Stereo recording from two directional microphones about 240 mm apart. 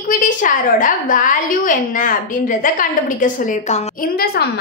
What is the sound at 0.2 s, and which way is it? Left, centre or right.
A woman's voice, left.